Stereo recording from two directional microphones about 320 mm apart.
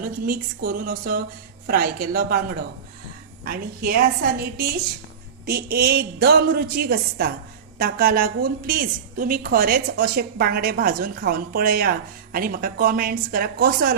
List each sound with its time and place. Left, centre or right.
0.0 s a woman's voice: right